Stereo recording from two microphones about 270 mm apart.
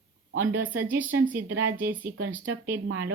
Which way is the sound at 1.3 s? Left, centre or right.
Right.